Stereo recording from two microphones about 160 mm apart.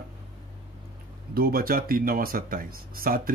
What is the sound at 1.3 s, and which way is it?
Speech, 70° right (ahead or behind).